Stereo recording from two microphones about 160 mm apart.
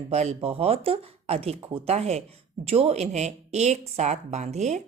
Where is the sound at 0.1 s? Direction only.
40° right (ahead or behind).